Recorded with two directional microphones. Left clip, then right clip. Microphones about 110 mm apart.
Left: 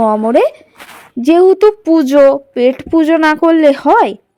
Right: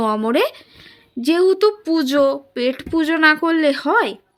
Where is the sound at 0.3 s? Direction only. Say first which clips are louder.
Left 8 dB; 40° left (ahead or behind).